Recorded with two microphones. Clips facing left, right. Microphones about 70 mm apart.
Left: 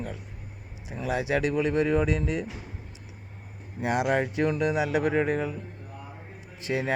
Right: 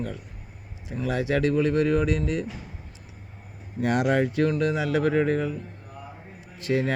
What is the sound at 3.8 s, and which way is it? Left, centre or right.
Speech, centre.